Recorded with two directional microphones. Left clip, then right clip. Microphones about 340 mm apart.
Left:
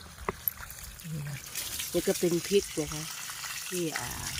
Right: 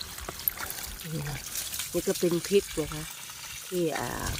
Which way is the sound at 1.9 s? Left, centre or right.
Centre.